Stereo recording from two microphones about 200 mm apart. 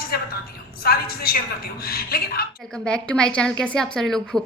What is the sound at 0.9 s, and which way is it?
Speech, 50° left (ahead or behind).